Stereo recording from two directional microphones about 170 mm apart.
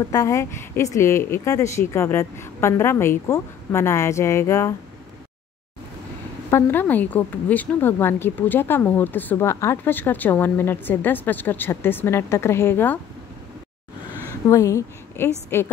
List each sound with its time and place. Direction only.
0.1 s a woman's voice: 20° left (ahead or behind)
6.5 s a woman's voice: 10° left (ahead or behind)
14.5 s a woman's voice: 15° left (ahead or behind)